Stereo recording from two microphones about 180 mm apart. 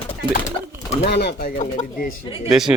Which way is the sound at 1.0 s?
65° left (ahead or behind).